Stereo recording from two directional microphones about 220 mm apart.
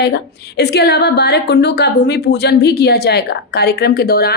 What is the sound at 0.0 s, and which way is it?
A woman's voice, 50° left (ahead or behind).